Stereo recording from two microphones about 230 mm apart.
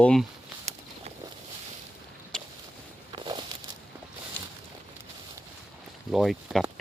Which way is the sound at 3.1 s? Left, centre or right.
Right.